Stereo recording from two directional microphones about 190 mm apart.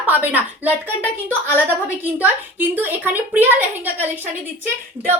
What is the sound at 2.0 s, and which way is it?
A woman's voice, 10° right (ahead or behind).